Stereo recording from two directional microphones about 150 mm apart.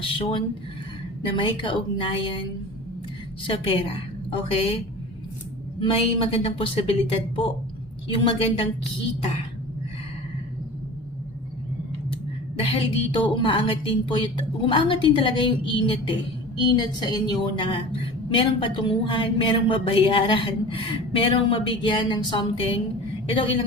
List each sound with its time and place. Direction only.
0.2 s a woman's voice: 35° left (ahead or behind)
5.8 s a woman's voice: 40° left (ahead or behind)
12.6 s a woman's voice: 35° left (ahead or behind)